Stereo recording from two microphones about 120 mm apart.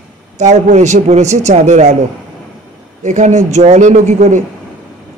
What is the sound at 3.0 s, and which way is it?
A man's voice, 85° right.